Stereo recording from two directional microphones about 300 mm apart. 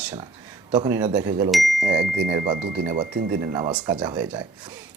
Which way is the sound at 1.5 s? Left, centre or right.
Centre.